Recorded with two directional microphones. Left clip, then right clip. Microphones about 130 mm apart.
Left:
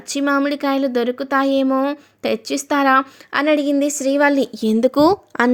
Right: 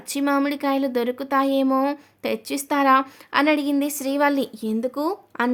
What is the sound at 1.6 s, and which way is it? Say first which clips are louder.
Speech: left 3 dB; 5° left (ahead or behind).